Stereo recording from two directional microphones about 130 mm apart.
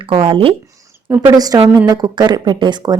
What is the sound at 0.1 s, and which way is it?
Speech, 45° right (ahead or behind).